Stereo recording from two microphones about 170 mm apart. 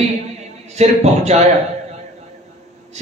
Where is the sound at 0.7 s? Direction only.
40° right (ahead or behind).